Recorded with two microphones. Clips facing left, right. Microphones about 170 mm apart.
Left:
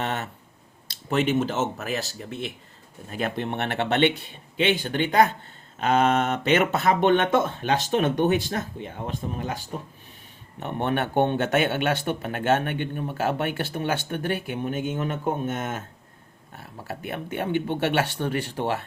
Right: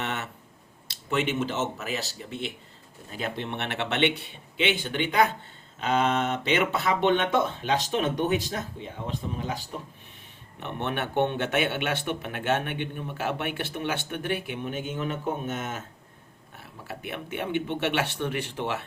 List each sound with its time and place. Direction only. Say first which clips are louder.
0.0 s a sound: left 4 dB; 35° left (ahead or behind)
1.1 s speech: left 4 dB; 40° left (ahead or behind)
3.1 s speech: left 4 dB; 55° left (ahead or behind)
16.9 s speech: left 3 dB; 40° left (ahead or behind)